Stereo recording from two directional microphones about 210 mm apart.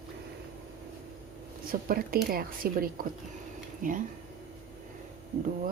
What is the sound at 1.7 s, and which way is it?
A woman's voice, 45° right (ahead or behind).